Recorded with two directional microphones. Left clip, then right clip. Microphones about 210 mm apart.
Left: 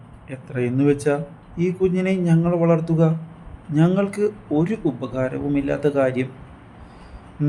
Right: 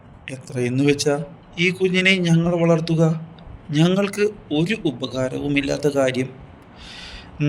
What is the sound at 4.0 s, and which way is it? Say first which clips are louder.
Speech: right 1 dB; 40° right (ahead or behind).